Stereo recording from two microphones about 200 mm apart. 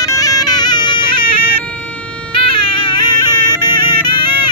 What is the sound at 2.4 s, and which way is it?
Music, 25° left (ahead or behind).